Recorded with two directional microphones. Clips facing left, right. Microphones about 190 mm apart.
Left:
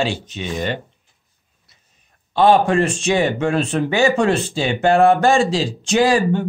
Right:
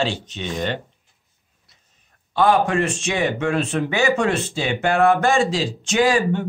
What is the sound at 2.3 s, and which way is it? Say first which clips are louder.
Speech: left 4 dB; 30° left (ahead or behind).